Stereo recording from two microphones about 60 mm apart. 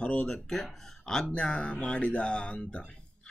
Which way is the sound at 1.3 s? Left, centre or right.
Centre.